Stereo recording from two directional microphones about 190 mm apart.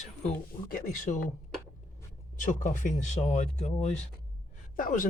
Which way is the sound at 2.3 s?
40° left (ahead or behind).